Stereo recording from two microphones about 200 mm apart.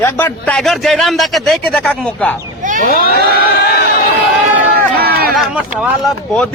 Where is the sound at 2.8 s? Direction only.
40° left (ahead or behind).